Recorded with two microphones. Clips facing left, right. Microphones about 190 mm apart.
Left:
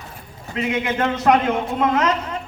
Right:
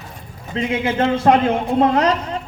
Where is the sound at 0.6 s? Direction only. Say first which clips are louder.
Right 2 dB; 30° right (ahead or behind).